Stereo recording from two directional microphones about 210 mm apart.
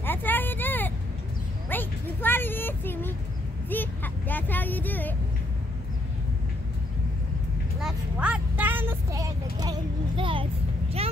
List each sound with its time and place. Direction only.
0.0 s vehicle: 10° left (ahead or behind)
1.7 s a sound: 10° left (ahead or behind)
3.7 s speech: 10° left (ahead or behind)
7.8 s speech: 5° right (ahead or behind); by 11.1 s 25° right (ahead or behind)